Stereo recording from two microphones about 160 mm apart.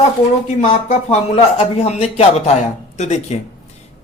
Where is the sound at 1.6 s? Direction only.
45° left (ahead or behind).